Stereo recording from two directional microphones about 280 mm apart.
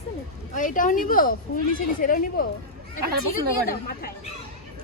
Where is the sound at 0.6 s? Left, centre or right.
Left.